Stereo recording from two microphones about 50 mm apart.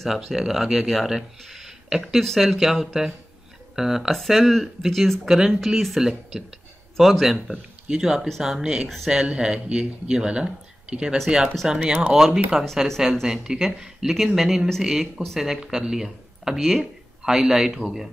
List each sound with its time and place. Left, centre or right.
0.1 s a man's voice: centre
1.4 s a sound: centre
2.1 s a man's voice: centre
8.8 s speech: centre
9.1 s a man's voice: centre